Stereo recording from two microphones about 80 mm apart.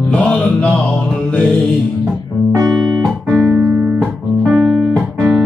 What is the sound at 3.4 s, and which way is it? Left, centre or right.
Music, right.